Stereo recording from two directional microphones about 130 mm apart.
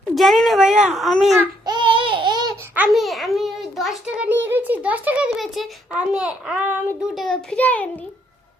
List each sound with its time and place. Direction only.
0.1 s a child's voice: centre (ahead or behind)
1.6 s babbling: 35° right (ahead or behind)
2.7 s a child's voice: 5° right (ahead or behind)
7.1 s a child's voice: centre (ahead or behind)